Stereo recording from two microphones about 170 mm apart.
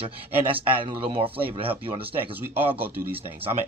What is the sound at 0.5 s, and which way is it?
Speech, 30° right (ahead or behind).